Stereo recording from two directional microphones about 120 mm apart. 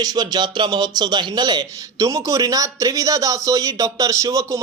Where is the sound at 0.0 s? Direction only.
35° right (ahead or behind).